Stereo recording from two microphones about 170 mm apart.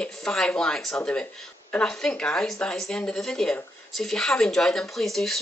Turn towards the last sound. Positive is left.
turn(degrees=0)  # may be behind; listen again after turning